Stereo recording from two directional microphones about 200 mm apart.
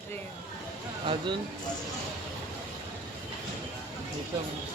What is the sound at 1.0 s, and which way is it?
Speech, 25° right (ahead or behind).